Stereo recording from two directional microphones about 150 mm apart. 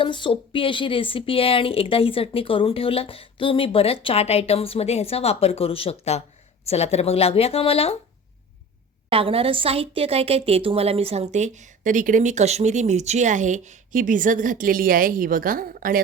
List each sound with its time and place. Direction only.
0.0 s speech: 35° left (ahead or behind)
9.0 s a woman's voice: 40° right (ahead or behind); by 16.0 s 70° right (ahead or behind)